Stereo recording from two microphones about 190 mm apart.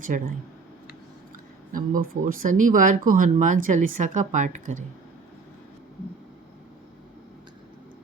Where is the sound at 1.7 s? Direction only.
45° right (ahead or behind).